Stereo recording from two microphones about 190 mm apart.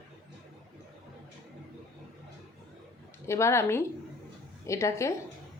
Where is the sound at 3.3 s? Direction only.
15° left (ahead or behind).